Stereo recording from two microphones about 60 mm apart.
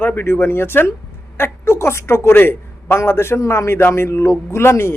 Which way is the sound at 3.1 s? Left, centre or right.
Left.